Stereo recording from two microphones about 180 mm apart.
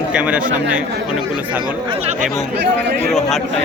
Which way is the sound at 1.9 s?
35° right (ahead or behind).